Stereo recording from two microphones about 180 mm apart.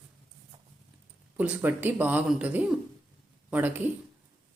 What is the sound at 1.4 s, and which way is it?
Speech, 10° right (ahead or behind).